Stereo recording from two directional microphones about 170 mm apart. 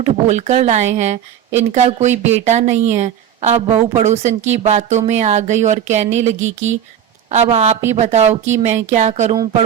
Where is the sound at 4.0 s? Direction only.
40° right (ahead or behind).